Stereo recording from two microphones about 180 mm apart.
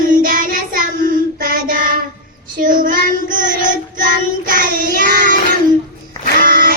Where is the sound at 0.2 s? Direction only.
45° right (ahead or behind).